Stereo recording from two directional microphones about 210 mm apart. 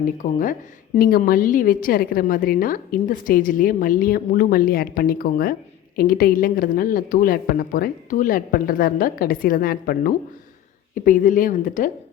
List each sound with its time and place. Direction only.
0.0 s a woman's voice: 40° left (ahead or behind)